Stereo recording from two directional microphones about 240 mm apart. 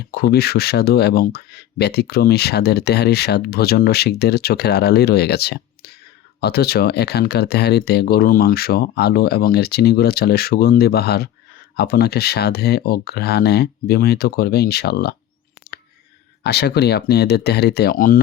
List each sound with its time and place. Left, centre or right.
0.0 s speech: left
16.4 s speech: left